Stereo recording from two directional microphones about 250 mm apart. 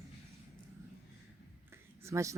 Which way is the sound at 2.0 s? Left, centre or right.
Centre.